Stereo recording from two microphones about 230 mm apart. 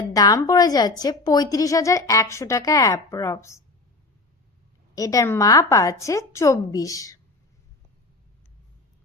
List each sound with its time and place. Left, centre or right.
0.1 s a woman's voice: centre
4.9 s a woman's voice: centre